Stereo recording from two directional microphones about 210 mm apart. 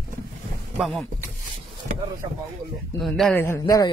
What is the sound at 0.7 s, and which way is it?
Speech, centre (ahead or behind).